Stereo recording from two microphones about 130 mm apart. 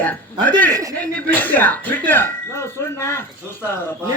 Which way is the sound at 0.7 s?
25° right (ahead or behind).